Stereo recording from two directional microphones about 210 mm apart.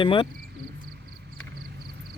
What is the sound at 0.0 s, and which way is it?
Speech, 25° left (ahead or behind).